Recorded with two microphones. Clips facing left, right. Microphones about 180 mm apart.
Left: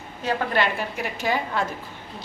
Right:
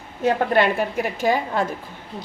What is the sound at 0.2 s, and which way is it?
A woman's voice, 55° right (ahead or behind).